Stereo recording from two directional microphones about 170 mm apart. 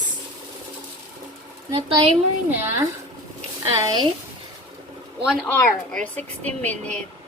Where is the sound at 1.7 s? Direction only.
35° right (ahead or behind).